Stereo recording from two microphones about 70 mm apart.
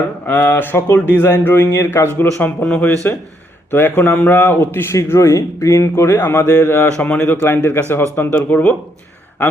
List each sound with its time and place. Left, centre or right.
0.3 s speech: left
2.6 s speech: centre
3.7 s speech: left
7.0 s speech: left
7.4 s speech: left